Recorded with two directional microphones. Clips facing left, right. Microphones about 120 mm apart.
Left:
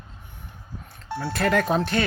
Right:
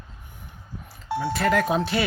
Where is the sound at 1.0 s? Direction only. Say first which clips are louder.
Right 4 dB; 10° right (ahead or behind).